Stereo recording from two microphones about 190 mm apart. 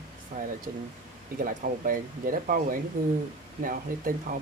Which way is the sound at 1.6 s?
45° right (ahead or behind).